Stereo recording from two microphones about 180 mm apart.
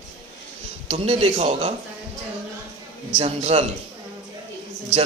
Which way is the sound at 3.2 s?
35° right (ahead or behind).